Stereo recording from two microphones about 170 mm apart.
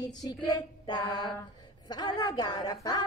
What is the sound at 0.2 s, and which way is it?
Mantra, 20° left (ahead or behind).